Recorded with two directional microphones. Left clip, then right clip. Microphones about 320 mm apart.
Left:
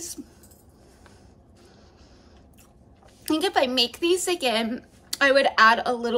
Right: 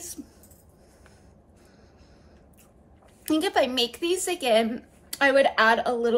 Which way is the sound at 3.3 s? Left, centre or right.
Centre.